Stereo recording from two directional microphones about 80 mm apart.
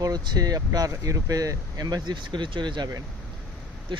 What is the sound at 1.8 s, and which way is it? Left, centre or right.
Speech, right.